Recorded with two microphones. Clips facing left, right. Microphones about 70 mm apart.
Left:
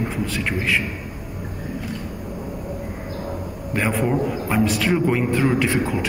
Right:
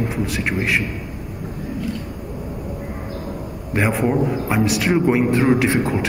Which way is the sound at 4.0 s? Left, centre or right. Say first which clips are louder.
Right 2 dB; centre.